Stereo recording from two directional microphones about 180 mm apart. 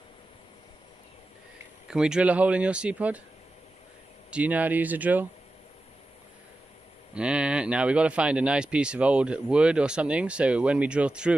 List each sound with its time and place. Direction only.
1.9 s speech: 5° right (ahead or behind)
4.3 s speech: 10° right (ahead or behind)
7.2 s speech: 5° right (ahead or behind)